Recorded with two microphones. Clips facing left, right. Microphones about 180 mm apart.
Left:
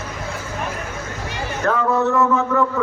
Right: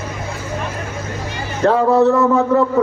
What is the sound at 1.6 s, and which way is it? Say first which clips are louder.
A man's voice: right 7 dB; 30° right (ahead or behind).